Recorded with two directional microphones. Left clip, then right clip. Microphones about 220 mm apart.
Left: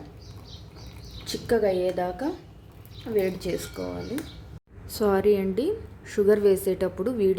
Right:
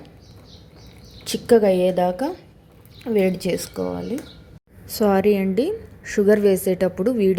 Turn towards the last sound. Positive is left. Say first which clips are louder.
# right 5 dB
turn(degrees=-15)  # may be behind; listen again after turning